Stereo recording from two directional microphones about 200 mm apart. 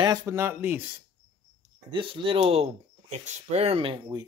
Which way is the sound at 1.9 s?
25° right (ahead or behind).